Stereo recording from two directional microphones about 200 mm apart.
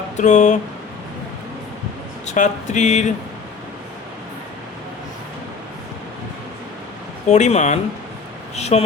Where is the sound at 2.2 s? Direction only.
40° left (ahead or behind).